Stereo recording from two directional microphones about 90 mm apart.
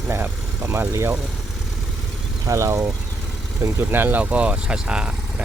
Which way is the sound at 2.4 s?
35° right (ahead or behind).